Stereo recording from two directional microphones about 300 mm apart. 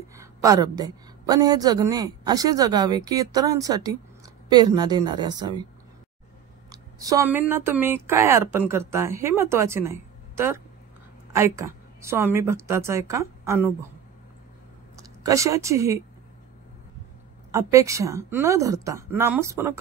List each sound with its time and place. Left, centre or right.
0.1 s a woman's voice: centre
6.7 s a woman's voice: centre
11.3 s a woman's voice: centre
15.0 s speech: centre
17.5 s a woman's voice: centre